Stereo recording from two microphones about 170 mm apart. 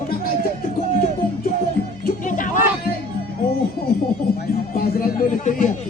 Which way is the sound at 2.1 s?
50° left (ahead or behind).